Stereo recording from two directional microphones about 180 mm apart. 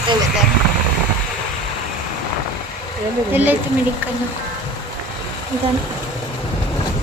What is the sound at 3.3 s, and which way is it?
Speech, 10° right (ahead or behind).